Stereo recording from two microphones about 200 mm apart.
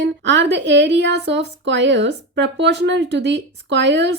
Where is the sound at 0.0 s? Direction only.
65° right (ahead or behind).